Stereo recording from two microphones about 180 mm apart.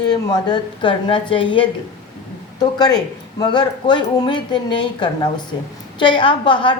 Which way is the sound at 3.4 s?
25° left (ahead or behind).